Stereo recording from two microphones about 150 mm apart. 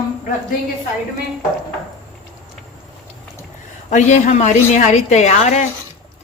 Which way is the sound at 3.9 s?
55° left (ahead or behind).